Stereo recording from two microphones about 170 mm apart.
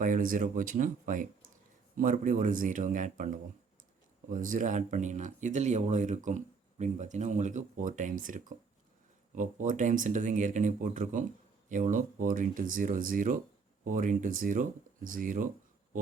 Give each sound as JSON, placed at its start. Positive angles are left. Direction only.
{"t": 0.0, "sound": "speech", "side_deg": -50}